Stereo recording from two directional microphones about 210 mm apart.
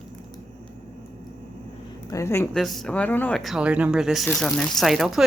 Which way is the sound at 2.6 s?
Centre (ahead or behind).